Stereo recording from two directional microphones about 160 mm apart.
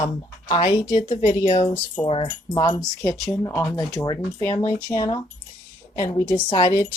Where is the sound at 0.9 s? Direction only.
40° left (ahead or behind).